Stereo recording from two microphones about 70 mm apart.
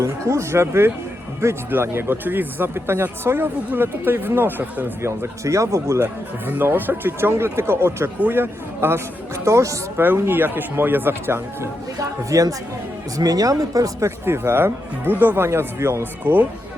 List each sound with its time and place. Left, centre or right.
0.0 s speech: right
5.0 s speech: right
6.5 s speech: right
10.0 s speech: right
11.9 s speech: right
14.3 s speech: right
15.4 s speech: right
16.2 s speech: right